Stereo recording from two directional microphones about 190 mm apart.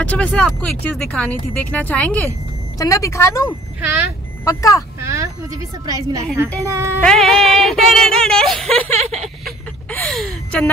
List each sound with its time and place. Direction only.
0.0 s speech: 5° left (ahead or behind)
5.0 s speech: 15° right (ahead or behind)
7.0 s speech: 5° left (ahead or behind)
9.1 s vehicle: centre (ahead or behind)
9.9 s a sound: 5° left (ahead or behind)